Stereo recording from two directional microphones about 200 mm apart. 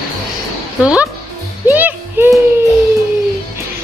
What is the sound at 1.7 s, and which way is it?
Music, 10° right (ahead or behind).